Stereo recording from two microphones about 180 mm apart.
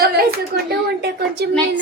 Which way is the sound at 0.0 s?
60° right (ahead or behind).